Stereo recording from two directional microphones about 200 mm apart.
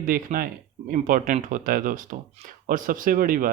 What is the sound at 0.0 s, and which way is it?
Speech, 45° right (ahead or behind).